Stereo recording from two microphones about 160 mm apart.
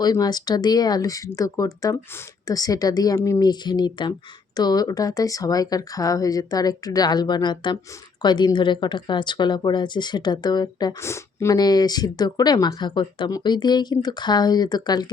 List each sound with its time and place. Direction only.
0.0 s a woman's voice: 25° left (ahead or behind)